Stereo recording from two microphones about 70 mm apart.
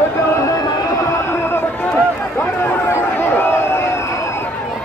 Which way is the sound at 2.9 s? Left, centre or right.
Left.